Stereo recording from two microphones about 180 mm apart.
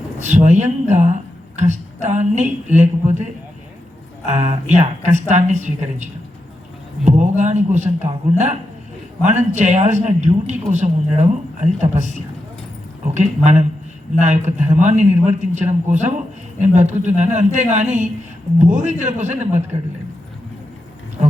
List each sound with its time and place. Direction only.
0.2 s a woman's voice: 40° right (ahead or behind)
4.3 s a woman's voice: 40° right (ahead or behind)
9.2 s a woman's voice: 40° right (ahead or behind)